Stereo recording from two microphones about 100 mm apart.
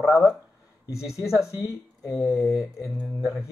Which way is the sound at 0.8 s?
30° left (ahead or behind).